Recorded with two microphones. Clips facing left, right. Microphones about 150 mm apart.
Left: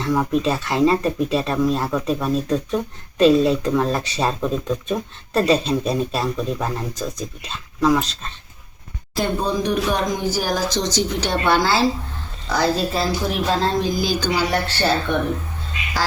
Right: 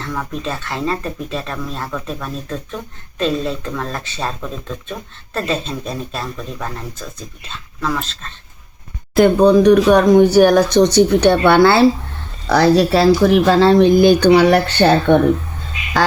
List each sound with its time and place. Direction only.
0.0 s speech: 10° left (ahead or behind)
9.1 s speech: 70° right (ahead or behind)
12.5 s speech: 80° right